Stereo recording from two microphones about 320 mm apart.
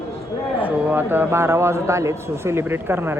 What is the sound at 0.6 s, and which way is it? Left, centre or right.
A man's voice, centre.